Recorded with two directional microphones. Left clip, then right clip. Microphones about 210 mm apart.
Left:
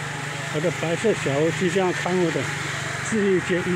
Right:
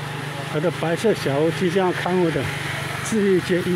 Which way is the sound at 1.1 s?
10° right (ahead or behind).